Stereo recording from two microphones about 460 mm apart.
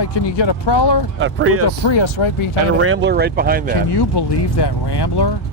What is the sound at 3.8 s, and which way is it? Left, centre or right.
Speech, left.